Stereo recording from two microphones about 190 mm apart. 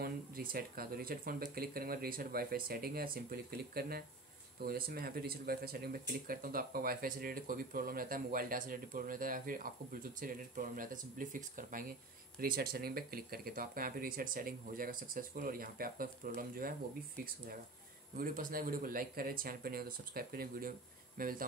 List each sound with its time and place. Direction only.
0.0 s speech: 50° right (ahead or behind)
18.1 s speech: 45° right (ahead or behind)